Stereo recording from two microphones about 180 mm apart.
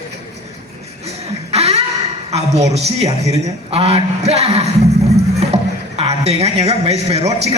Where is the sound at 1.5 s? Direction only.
35° right (ahead or behind).